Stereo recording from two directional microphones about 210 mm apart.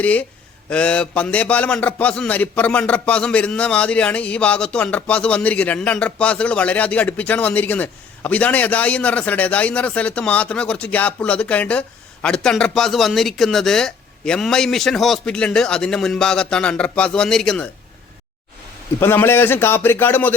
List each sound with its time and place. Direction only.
0.0 s a man's voice: 5° left (ahead or behind)
18.9 s a man's voice: 10° left (ahead or behind)